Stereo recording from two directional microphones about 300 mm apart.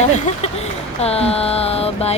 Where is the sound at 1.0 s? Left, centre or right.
Centre.